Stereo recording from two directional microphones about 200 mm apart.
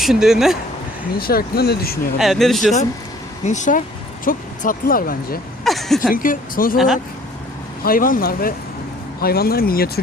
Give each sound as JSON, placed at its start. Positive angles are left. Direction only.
{"t": 0.0, "sound": "speech", "side_deg": 0}
{"t": 1.2, "sound": "speech", "side_deg": 50}
{"t": 2.1, "sound": "speech", "side_deg": 0}
{"t": 3.4, "sound": "speech", "side_deg": 35}
{"t": 5.6, "sound": "speech", "side_deg": 0}
{"t": 6.1, "sound": "speech", "side_deg": 45}
{"t": 6.7, "sound": "speech", "side_deg": 0}
{"t": 7.9, "sound": "speech", "side_deg": 45}